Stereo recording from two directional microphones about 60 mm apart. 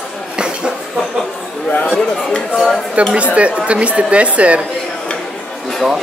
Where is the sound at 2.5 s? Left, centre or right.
Centre.